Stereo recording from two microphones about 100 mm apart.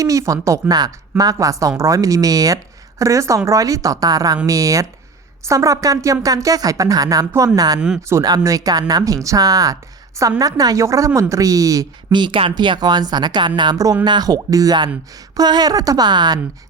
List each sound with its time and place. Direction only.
0.0 s a woman's voice: 35° right (ahead or behind)
12.1 s a woman's voice: 50° right (ahead or behind)